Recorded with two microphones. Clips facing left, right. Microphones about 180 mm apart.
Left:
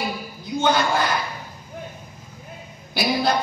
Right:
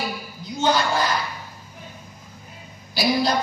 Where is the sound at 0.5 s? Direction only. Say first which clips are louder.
Left 1 dB; 55° left (ahead or behind).